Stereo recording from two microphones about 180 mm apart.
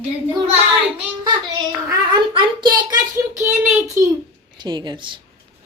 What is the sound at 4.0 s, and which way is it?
Speech, 45° right (ahead or behind).